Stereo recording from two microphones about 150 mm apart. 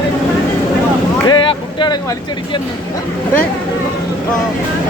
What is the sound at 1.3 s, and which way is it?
Boat, 30° left (ahead or behind).